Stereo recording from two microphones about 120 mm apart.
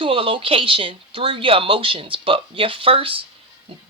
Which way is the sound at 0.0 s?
45° right (ahead or behind).